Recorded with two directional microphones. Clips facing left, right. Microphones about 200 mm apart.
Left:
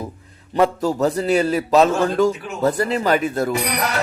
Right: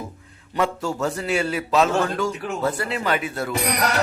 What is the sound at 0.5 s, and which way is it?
A man's voice, 40° left (ahead or behind).